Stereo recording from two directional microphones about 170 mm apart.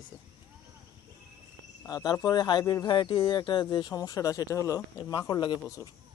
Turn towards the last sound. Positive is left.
turn(degrees=25)  # may be behind; listen again after turning